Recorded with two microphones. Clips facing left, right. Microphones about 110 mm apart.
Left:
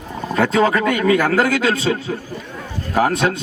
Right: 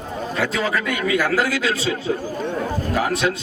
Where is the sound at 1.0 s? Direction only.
50° left (ahead or behind).